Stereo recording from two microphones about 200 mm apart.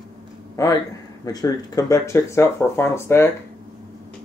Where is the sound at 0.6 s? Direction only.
15° left (ahead or behind).